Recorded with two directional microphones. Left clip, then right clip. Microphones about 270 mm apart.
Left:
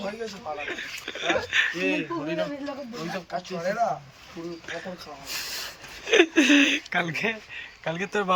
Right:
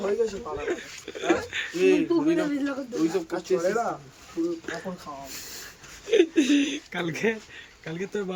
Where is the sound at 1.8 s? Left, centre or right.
Right.